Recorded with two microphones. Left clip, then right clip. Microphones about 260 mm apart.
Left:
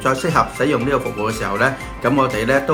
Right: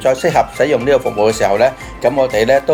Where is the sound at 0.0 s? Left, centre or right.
Centre.